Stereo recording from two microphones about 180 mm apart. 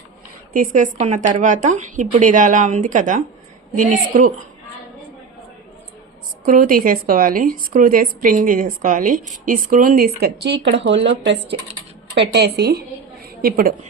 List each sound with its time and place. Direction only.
0.5 s speech: 45° right (ahead or behind)
6.4 s speech: 50° right (ahead or behind); by 11.3 s 80° right
12.3 s a woman's voice: 65° right (ahead or behind)